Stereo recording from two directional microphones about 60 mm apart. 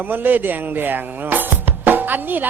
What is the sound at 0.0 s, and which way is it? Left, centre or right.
Speech, right.